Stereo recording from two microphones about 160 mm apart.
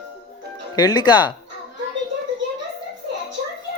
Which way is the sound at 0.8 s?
25° left (ahead or behind).